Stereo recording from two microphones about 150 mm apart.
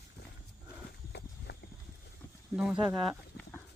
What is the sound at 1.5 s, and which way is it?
Clip-clop, 90° left.